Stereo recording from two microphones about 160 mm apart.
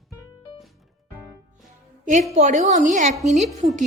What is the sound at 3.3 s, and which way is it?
Speech, 45° right (ahead or behind).